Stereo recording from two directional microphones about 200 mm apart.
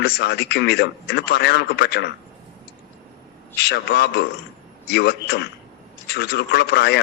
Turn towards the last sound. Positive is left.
turn(degrees=55)  # may be behind; listen again after turning